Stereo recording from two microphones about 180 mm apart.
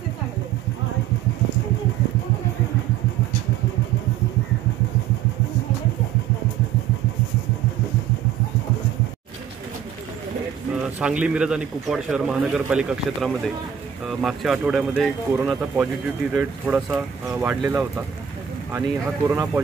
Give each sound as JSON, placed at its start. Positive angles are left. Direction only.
{"t": 10.7, "sound": "speech", "side_deg": -5}